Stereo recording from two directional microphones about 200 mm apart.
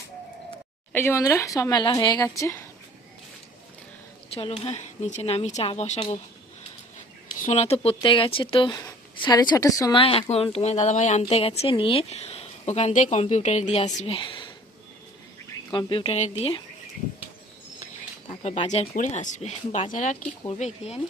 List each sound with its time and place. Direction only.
0.9 s speech: 10° left (ahead or behind)
4.4 s speech: 30° left (ahead or behind)
7.4 s speech: 30° left (ahead or behind)
15.7 s speech: 25° left (ahead or behind)
18.3 s speech: 30° left (ahead or behind)